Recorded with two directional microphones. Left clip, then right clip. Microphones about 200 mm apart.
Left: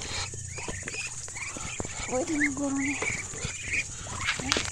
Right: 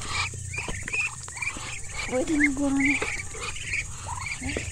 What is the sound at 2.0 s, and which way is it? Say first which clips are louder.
Speech: right 4 dB; 15° right (ahead or behind).